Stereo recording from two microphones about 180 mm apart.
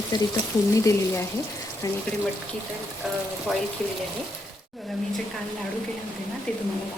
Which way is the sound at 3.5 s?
Centre (ahead or behind).